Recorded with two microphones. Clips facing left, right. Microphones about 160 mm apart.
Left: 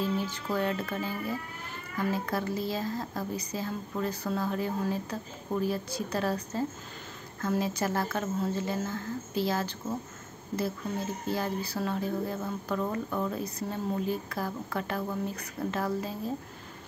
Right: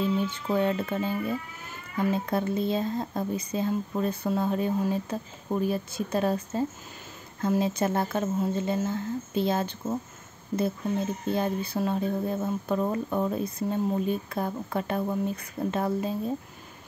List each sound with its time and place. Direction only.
0.2 s a woman's voice: 20° right (ahead or behind)
11.2 s speech: 25° right (ahead or behind)